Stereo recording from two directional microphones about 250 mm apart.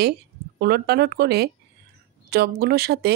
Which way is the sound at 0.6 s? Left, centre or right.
Right.